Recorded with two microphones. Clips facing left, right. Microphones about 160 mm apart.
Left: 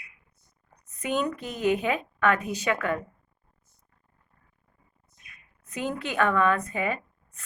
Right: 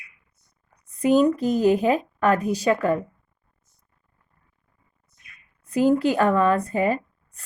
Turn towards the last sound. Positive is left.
turn(degrees=-35)  # may be behind; listen again after turning